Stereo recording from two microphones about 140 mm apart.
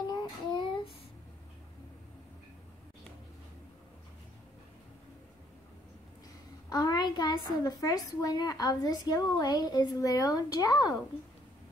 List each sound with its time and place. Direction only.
0.0 s child singing: 30° left (ahead or behind)
6.7 s a woman's voice: 25° left (ahead or behind)